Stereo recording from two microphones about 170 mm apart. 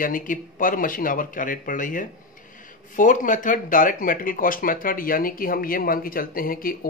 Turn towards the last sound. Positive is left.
turn(degrees=55)  # may be behind; listen again after turning